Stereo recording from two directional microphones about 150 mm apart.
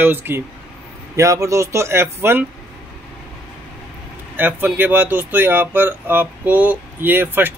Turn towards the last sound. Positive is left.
turn(degrees=-15)  # may be behind; listen again after turning